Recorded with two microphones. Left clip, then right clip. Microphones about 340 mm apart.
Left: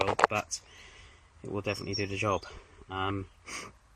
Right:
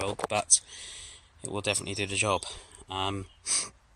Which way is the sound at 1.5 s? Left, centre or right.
Centre.